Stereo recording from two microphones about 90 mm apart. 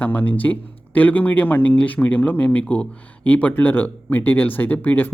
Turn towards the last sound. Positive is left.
turn(degrees=20)  # may be behind; listen again after turning